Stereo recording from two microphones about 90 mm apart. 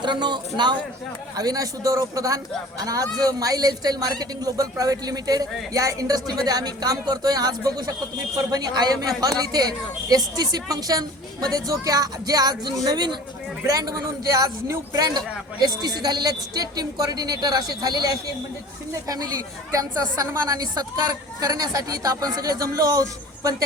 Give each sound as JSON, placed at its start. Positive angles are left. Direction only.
{"t": 0.0, "sound": "a man's voice", "side_deg": -55}
{"t": 1.4, "sound": "speech", "side_deg": -45}
{"t": 13.7, "sound": "speech", "side_deg": -40}